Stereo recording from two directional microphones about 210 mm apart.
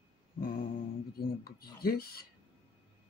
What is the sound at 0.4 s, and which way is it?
Mantra, 45° left (ahead or behind).